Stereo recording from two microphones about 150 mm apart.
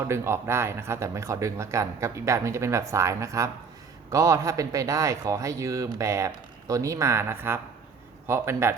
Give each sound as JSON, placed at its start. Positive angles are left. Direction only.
{"t": 0.1, "sound": "speech", "side_deg": -15}